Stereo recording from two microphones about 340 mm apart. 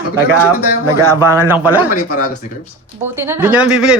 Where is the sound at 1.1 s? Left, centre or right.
Centre.